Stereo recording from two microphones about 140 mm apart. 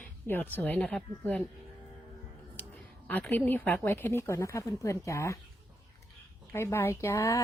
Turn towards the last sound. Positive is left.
turn(degrees=20)  # may be behind; listen again after turning